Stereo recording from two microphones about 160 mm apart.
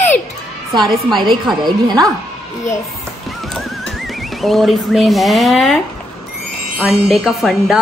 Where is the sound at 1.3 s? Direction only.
25° right (ahead or behind).